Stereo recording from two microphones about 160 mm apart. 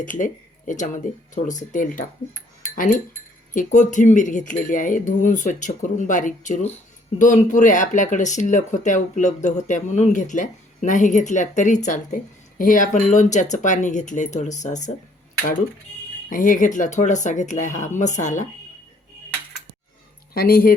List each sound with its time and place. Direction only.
0.0 s speech: 55° left (ahead or behind)
1.5 s speech: 55° left (ahead or behind)
3.5 s speech: 55° left (ahead or behind)
16.3 s speech: 55° left (ahead or behind)
20.3 s speech: 70° left (ahead or behind)